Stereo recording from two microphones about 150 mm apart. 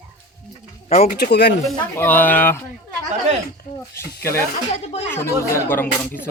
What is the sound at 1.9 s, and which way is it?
Speech, 10° left (ahead or behind).